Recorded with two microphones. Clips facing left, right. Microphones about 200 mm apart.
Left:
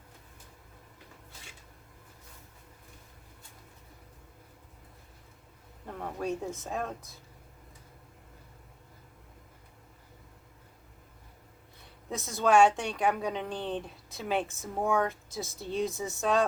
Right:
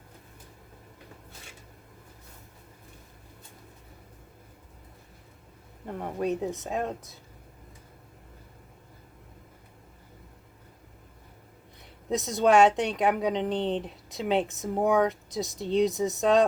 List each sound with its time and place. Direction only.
5.9 s speech: 20° right (ahead or behind)
12.0 s speech: 20° right (ahead or behind)